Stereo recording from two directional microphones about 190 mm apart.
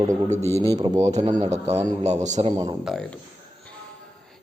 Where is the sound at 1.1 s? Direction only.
35° right (ahead or behind).